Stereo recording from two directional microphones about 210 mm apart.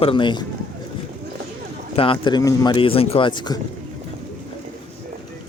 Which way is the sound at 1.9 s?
25° left (ahead or behind).